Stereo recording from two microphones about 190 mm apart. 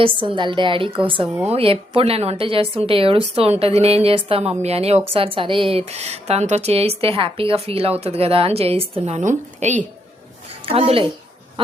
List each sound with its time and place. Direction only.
0.0 s a woman's voice: 25° right (ahead or behind)